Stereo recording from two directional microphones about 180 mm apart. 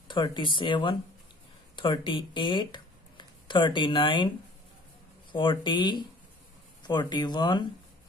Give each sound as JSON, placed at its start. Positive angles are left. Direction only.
{"t": 0.1, "sound": "speech", "side_deg": 25}
{"t": 5.3, "sound": "speech", "side_deg": 25}